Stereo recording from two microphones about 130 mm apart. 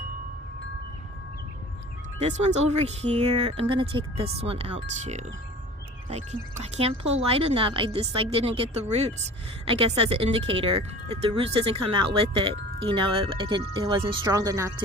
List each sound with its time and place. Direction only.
2.1 s speech: 60° right (ahead or behind); by 14.2 s 40° right (ahead or behind)
14.3 s speech: 25° right (ahead or behind)